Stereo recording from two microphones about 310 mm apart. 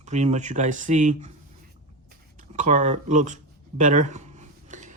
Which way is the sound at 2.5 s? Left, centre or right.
Right.